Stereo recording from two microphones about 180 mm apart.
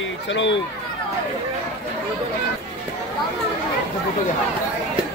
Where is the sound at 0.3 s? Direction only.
90° left.